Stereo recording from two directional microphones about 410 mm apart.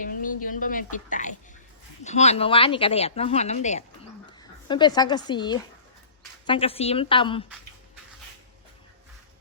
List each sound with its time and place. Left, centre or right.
0.0 s a woman's voice: centre